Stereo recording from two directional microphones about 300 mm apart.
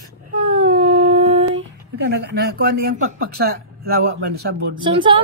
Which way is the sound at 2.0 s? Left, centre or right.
Right.